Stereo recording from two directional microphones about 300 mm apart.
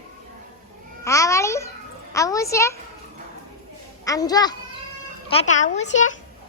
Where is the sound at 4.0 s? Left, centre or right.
Centre.